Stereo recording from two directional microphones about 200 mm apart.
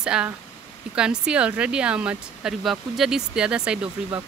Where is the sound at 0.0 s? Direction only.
5° right (ahead or behind).